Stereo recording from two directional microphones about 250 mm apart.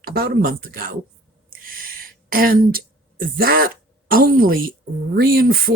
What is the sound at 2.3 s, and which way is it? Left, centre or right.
Speech, right.